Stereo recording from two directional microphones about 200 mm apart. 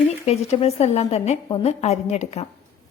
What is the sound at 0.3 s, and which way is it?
A woman's voice, 30° left (ahead or behind).